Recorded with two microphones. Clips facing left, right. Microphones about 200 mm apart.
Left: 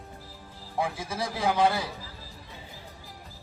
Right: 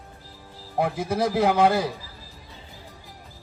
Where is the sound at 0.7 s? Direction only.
65° right (ahead or behind).